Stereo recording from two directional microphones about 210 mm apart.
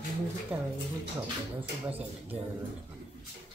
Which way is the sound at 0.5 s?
10° right (ahead or behind).